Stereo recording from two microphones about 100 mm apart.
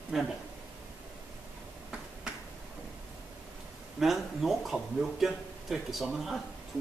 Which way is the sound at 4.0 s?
Centre (ahead or behind).